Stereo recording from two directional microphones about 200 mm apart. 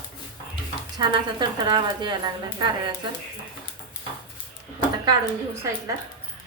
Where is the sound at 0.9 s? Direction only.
20° right (ahead or behind).